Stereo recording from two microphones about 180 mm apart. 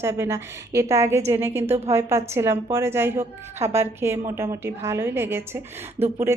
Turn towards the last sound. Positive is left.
turn(degrees=-15)  # may be behind; listen again after turning